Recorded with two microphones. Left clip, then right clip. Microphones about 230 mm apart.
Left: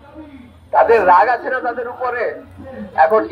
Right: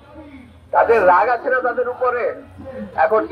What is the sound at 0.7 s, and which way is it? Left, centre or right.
A man's voice, left.